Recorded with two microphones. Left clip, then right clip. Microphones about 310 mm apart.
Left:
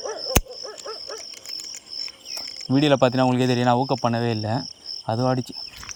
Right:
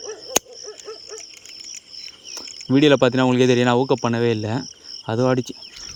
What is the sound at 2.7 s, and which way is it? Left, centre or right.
Speech, centre.